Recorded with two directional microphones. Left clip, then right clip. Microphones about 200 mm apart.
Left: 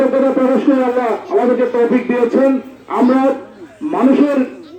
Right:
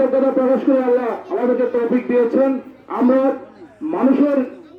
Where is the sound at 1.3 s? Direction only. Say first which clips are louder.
Left 3 dB; 40° right (ahead or behind).